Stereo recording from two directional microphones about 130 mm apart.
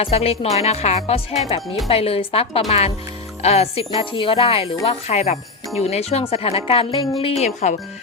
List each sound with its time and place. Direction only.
0.0 s speech: 50° left (ahead or behind)
7.4 s speech: 65° left (ahead or behind)